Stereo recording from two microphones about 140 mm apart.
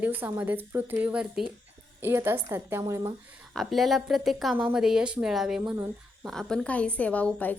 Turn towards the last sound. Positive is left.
turn(degrees=10)  # may be behind; listen again after turning